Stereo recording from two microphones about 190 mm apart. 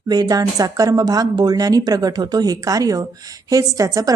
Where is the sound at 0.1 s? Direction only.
20° right (ahead or behind).